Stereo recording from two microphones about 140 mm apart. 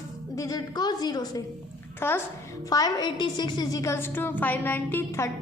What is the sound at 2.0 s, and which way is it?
Speech, 15° left (ahead or behind).